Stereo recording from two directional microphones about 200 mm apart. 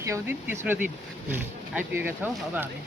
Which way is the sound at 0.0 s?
15° right (ahead or behind).